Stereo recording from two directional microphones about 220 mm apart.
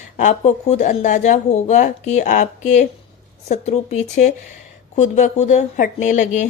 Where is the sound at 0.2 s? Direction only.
30° left (ahead or behind).